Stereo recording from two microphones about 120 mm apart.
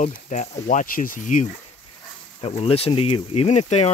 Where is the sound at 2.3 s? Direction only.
55° left (ahead or behind).